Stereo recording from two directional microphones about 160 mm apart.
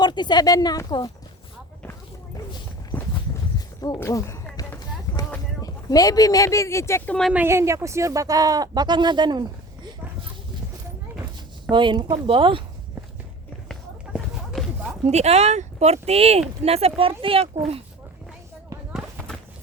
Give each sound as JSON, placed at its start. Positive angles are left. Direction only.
{"t": 0.0, "sound": "speech", "side_deg": 30}
{"t": 2.9, "sound": "walk", "side_deg": 15}
{"t": 3.8, "sound": "speech", "side_deg": 20}
{"t": 4.5, "sound": "run", "side_deg": 25}
{"t": 5.6, "sound": "speech", "side_deg": 20}
{"t": 7.3, "sound": "speech", "side_deg": -15}
{"t": 11.7, "sound": "speech", "side_deg": -30}
{"t": 14.1, "sound": "a sound", "side_deg": 0}
{"t": 15.0, "sound": "speech", "side_deg": -45}
{"t": 18.9, "sound": "a sound", "side_deg": 0}